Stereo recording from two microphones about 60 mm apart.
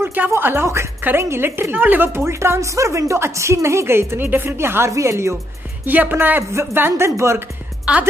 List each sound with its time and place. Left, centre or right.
0.0 s a sound: right
0.3 s a woman's voice: right
2.1 s speech: right
4.9 s speech: right
5.9 s a woman's voice: right
7.2 s speech: right
7.9 s a woman's voice: centre